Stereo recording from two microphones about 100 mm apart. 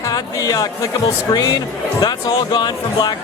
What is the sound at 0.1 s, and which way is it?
Speech, 40° left (ahead or behind).